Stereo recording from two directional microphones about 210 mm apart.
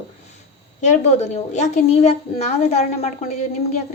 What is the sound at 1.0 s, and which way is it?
Speech, 30° left (ahead or behind).